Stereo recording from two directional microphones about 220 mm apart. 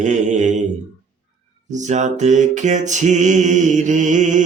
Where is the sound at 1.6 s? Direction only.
35° right (ahead or behind).